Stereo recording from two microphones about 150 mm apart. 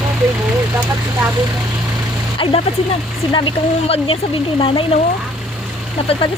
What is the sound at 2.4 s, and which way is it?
Speech, 35° left (ahead or behind).